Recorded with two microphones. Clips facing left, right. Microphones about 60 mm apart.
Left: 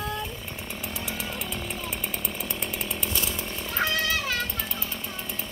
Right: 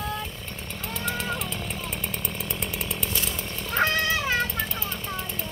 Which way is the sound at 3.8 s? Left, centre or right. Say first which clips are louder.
Right 3 dB; right.